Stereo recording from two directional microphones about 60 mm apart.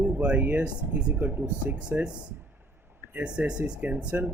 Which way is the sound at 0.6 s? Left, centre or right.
Centre.